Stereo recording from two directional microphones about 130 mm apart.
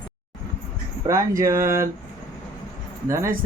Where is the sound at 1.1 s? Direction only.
25° right (ahead or behind).